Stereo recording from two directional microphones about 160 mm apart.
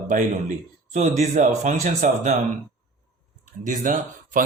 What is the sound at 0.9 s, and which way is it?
Speech, 45° right (ahead or behind).